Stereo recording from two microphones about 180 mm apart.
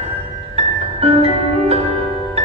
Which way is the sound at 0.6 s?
35° right (ahead or behind).